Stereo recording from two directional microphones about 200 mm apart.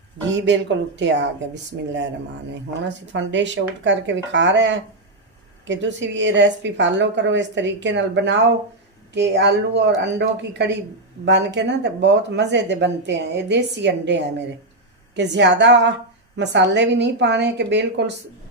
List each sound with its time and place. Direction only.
0.3 s speech: 65° right (ahead or behind)
3.1 s speech: 65° right (ahead or behind)